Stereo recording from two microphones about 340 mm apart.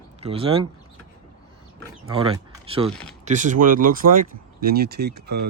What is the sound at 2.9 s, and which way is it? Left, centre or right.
Speech, centre.